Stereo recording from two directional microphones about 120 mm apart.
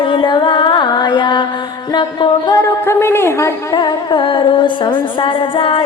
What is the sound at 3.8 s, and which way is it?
Music, 45° left (ahead or behind).